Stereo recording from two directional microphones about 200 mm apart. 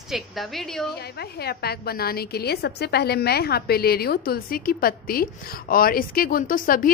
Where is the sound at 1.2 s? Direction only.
55° left (ahead or behind).